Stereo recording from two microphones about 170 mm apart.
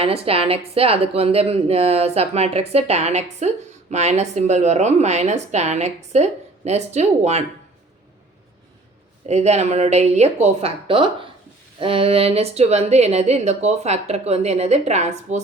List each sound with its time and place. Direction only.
0.0 s a woman's voice: 35° right (ahead or behind)
9.2 s a woman's voice: 40° right (ahead or behind)